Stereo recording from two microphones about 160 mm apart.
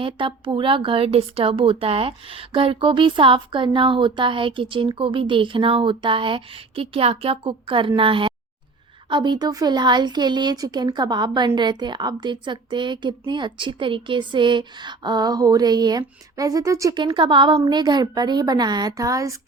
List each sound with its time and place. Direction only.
0.0 s speech: 30° right (ahead or behind)